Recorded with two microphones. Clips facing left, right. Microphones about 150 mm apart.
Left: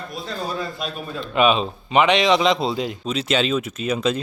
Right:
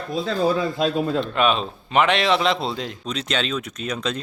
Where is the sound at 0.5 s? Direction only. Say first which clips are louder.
Right 7 dB; 90° right.